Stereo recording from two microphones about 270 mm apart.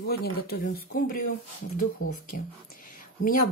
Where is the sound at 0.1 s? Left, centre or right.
Left.